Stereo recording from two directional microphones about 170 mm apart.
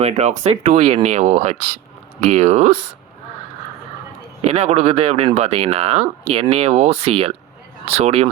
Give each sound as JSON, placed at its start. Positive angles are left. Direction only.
{"t": 0.0, "sound": "speech", "side_deg": -40}
{"t": 4.4, "sound": "speech", "side_deg": -40}